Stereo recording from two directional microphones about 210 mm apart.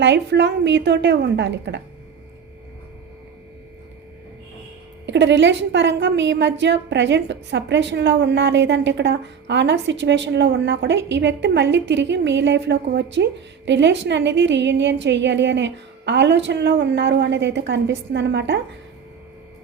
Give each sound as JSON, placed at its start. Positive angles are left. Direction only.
{"t": 0.0, "sound": "a woman's voice", "side_deg": -55}
{"t": 5.0, "sound": "a woman's voice", "side_deg": -55}